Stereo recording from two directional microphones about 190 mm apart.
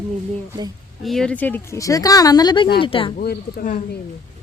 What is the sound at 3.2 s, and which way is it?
Speech, 55° left (ahead or behind).